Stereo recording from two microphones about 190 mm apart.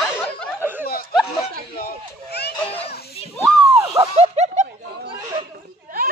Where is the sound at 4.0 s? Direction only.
35° right (ahead or behind).